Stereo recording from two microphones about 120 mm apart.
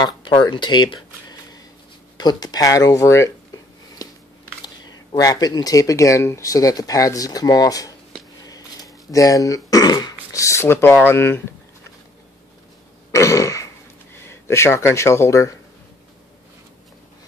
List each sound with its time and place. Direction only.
0.0 s speech: 40° left (ahead or behind)
2.1 s a sound: 35° left (ahead or behind)
4.8 s speech: 30° left (ahead or behind)
8.5 s throat clearing: 30° left (ahead or behind)
10.3 s speech: 25° left (ahead or behind)
13.1 s throat clearing: 25° left (ahead or behind)
14.2 s speech: 20° left (ahead or behind)